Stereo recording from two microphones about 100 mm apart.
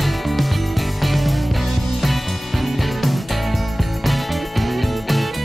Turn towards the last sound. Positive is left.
turn(degrees=0)  # may be behind; listen again after turning